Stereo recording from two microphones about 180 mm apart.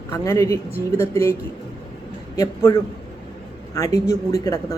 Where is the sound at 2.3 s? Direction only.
20° left (ahead or behind).